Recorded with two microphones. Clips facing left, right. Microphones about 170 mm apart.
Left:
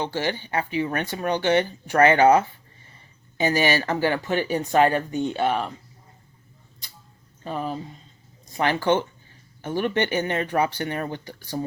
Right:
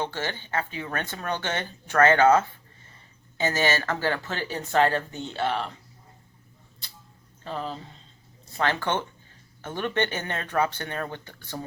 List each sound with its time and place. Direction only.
0.0 s speech: 15° left (ahead or behind)
7.4 s speech: 15° left (ahead or behind)